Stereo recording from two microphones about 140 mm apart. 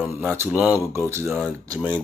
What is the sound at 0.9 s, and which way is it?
Speech, 20° right (ahead or behind).